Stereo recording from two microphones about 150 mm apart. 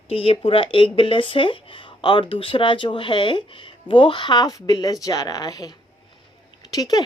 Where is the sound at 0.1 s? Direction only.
40° left (ahead or behind).